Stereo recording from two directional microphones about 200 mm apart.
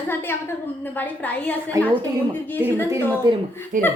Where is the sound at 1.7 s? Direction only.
15° right (ahead or behind).